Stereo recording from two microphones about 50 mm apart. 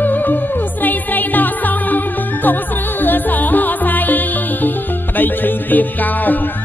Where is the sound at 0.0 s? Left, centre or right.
Left.